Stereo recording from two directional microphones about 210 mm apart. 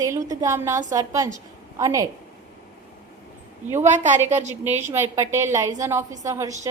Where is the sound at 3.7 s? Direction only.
35° right (ahead or behind).